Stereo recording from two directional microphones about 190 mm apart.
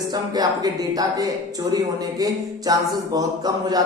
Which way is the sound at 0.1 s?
20° right (ahead or behind).